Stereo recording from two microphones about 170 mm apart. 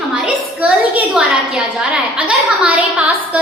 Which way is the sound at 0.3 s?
5° right (ahead or behind).